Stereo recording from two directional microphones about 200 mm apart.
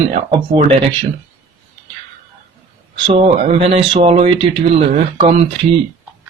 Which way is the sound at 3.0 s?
25° right (ahead or behind).